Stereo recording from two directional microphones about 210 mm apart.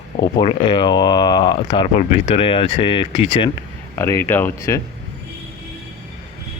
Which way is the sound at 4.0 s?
10° left (ahead or behind).